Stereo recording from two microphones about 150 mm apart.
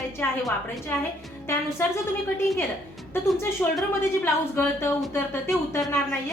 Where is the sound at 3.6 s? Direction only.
10° left (ahead or behind).